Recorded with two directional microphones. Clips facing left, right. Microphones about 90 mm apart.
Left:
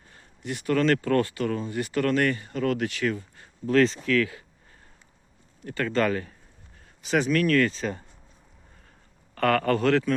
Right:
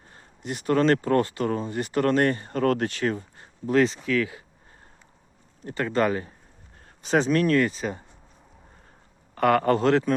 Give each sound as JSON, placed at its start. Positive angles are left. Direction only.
{"t": 0.1, "sound": "speech", "side_deg": -30}
{"t": 3.8, "sound": "speech", "side_deg": -15}
{"t": 5.6, "sound": "speech", "side_deg": -20}
{"t": 6.8, "sound": "speech", "side_deg": -35}
{"t": 9.3, "sound": "speech", "side_deg": -20}